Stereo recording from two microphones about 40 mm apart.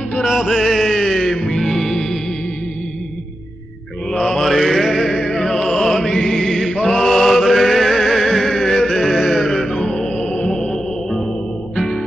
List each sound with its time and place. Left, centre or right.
0.2 s music: centre
1.7 s music: centre
4.2 s mantra: centre
5.1 s music: left
5.4 s music: centre
5.9 s chant: centre
6.9 s music: centre
9.7 s music: left
10.7 s music: centre